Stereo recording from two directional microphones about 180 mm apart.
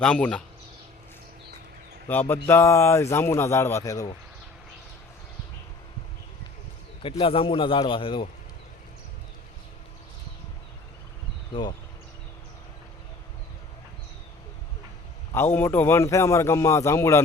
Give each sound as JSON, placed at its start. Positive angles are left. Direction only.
{"t": 0.0, "sound": "a man's voice", "side_deg": 5}
{"t": 2.0, "sound": "a man's voice", "side_deg": 10}
{"t": 7.0, "sound": "a man's voice", "side_deg": 30}
{"t": 11.6, "sound": "a man's voice", "side_deg": 25}
{"t": 15.3, "sound": "a man's voice", "side_deg": 15}